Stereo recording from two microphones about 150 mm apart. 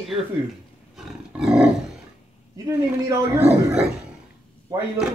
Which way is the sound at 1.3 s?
5° right (ahead or behind).